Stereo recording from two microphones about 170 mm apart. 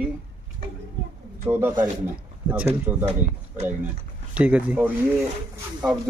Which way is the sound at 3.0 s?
40° right (ahead or behind).